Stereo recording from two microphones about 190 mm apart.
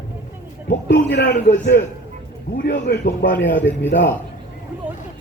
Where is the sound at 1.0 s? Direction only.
65° left (ahead or behind).